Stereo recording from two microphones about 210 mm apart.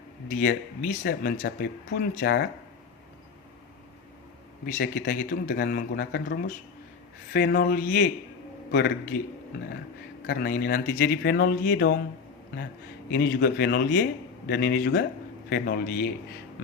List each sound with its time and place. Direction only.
0.3 s a man's voice: 45° left (ahead or behind)
4.6 s a man's voice: 45° left (ahead or behind)
10.2 s a man's voice: 50° left (ahead or behind)
13.1 s a man's voice: 50° left (ahead or behind)